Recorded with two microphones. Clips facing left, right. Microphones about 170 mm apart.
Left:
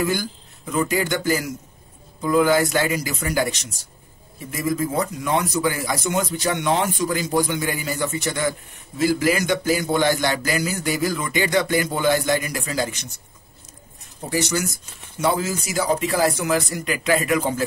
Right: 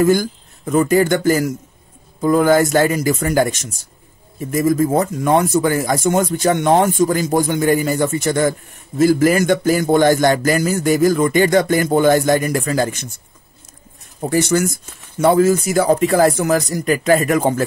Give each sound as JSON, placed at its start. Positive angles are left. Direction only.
{"t": 0.0, "sound": "speech", "side_deg": -45}
{"t": 14.3, "sound": "speech", "side_deg": -50}